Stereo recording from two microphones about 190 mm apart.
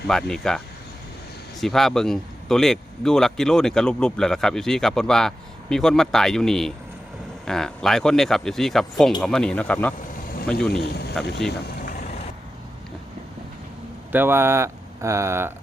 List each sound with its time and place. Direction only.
0.1 s speech: 5° left (ahead or behind)
1.6 s speech: centre (ahead or behind)
10.7 s speech: 60° left (ahead or behind)
14.1 s speech: 10° right (ahead or behind)